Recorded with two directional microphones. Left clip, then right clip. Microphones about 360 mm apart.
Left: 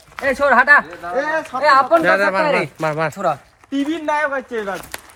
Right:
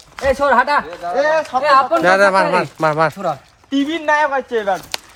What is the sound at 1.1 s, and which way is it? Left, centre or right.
Speech, right.